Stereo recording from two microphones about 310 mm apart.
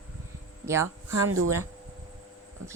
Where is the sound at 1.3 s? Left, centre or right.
Right.